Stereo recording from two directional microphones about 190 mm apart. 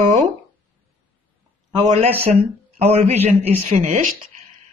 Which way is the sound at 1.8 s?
35° right (ahead or behind).